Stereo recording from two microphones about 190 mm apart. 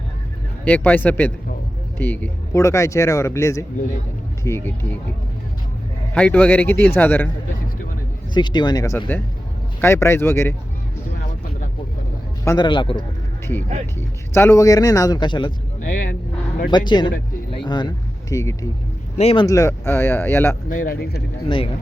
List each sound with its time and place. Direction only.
0.6 s speech: 10° left (ahead or behind)
6.1 s speech: 5° left (ahead or behind)
8.3 s a man's voice: 25° left (ahead or behind)
12.5 s a man's voice: 25° left (ahead or behind)
14.3 s a man's voice: 15° left (ahead or behind)
16.7 s a man's voice: 25° left (ahead or behind)
19.1 s speech: 30° left (ahead or behind)
19.5 s speech: 15° left (ahead or behind)
20.7 s speech: 45° left (ahead or behind)